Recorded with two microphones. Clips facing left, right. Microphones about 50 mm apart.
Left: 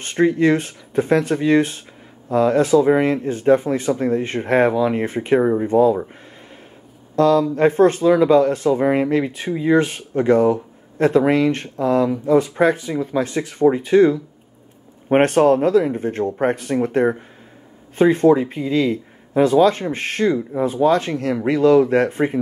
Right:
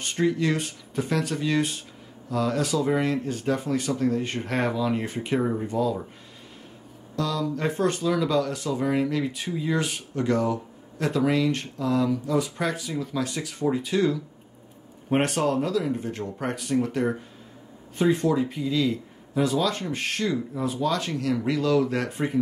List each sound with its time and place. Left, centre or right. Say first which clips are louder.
0.0 s speech: left 8 dB; left
7.2 s speech: left 12 dB; left